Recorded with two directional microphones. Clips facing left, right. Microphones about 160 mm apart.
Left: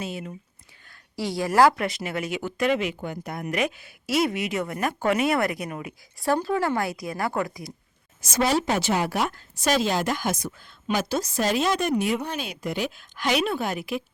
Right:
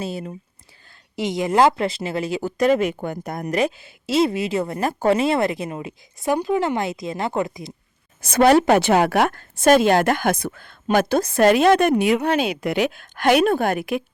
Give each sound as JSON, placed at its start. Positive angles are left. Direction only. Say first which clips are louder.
{"t": 0.0, "sound": "speech", "louder": "right 4 dB", "side_deg": -35}
{"t": 1.1, "sound": "speech", "louder": "right 3 dB", "side_deg": -20}
{"t": 8.2, "sound": "a woman's voice", "louder": "right 9 dB", "side_deg": -60}